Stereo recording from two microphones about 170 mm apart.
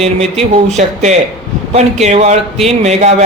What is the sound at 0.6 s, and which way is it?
Speech, 45° right (ahead or behind).